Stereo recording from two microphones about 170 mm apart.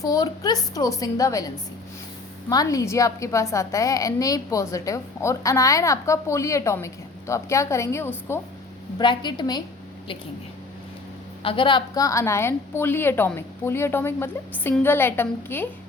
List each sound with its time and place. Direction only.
0.0 s a woman's voice: 20° left (ahead or behind)
9.0 s a woman's voice: 25° left (ahead or behind)
11.4 s a woman's voice: 30° left (ahead or behind); by 15.7 s 10° left (ahead or behind)